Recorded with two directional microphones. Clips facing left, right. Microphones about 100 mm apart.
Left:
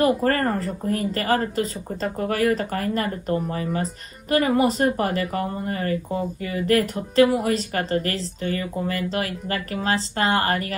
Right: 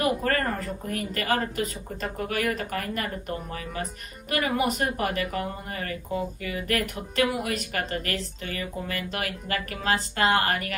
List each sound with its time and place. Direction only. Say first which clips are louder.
0.0 s speech: left 5 dB; 35° left (ahead or behind)